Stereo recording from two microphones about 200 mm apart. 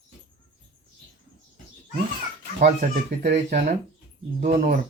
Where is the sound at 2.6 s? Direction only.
40° right (ahead or behind).